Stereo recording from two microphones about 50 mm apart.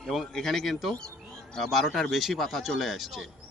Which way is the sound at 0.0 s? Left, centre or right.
Centre.